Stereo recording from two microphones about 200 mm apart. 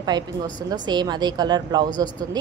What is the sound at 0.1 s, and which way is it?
A woman's voice, 20° right (ahead or behind).